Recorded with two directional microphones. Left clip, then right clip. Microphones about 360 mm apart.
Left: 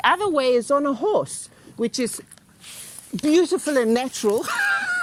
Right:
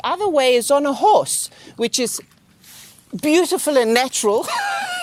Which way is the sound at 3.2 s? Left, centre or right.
Right.